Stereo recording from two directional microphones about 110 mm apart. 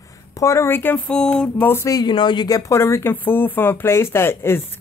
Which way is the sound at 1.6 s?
20° left (ahead or behind).